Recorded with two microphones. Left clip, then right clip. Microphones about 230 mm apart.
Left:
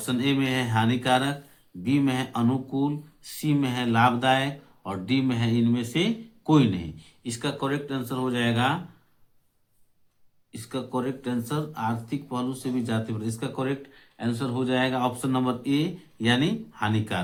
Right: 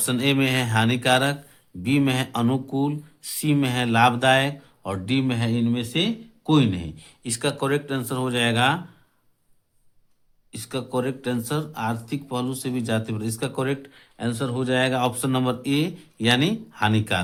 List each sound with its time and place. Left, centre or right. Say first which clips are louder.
0.0 s speech: right 4 dB; right
10.5 s speech: right 3 dB; right